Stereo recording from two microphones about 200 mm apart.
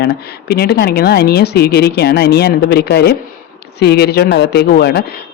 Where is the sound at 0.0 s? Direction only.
50° left (ahead or behind).